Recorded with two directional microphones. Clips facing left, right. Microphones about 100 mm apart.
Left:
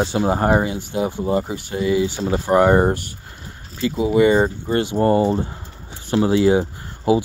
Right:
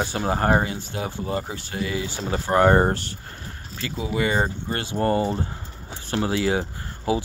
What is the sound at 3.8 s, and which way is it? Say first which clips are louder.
Speech: left 10 dB; 20° left (ahead or behind).